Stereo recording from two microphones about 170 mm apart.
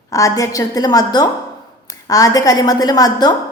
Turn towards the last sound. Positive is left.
turn(degrees=20)  # may be behind; listen again after turning